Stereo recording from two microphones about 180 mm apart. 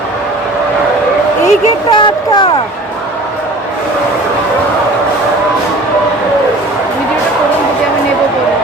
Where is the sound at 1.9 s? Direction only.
25° left (ahead or behind).